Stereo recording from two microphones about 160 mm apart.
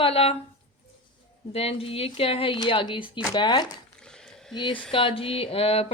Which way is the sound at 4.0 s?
5° left (ahead or behind).